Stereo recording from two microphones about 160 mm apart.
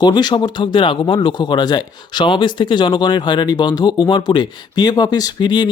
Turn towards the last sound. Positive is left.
turn(degrees=25)  # may be behind; listen again after turning